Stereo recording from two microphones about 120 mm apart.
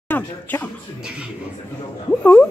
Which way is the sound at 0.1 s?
15° left (ahead or behind).